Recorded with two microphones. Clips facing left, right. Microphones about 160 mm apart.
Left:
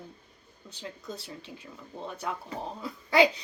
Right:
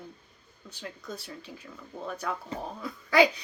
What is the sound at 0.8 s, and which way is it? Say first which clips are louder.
Speech: even; 30° left (ahead or behind).